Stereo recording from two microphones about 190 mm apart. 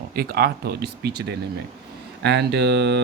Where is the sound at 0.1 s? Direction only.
50° right (ahead or behind).